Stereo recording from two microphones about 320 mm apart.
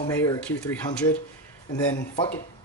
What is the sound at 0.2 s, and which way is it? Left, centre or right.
Speech, centre.